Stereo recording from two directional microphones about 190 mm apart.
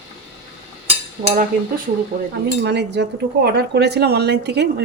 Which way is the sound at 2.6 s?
60° right (ahead or behind).